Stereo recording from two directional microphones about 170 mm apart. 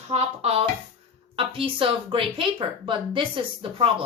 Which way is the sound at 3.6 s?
30° right (ahead or behind).